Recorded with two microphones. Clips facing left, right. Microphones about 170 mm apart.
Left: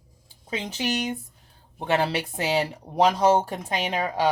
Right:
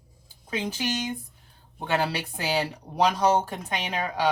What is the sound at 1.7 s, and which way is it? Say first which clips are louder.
Speech: left 3 dB; 25° left (ahead or behind).